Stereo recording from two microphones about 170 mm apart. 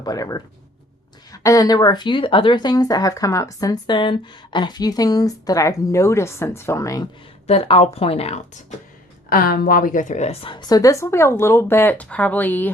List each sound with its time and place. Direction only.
0.0 s speech: 20° left (ahead or behind)
7.4 s speech: 35° left (ahead or behind)
9.3 s a woman's voice: 60° left (ahead or behind); by 12.7 s 10° left (ahead or behind)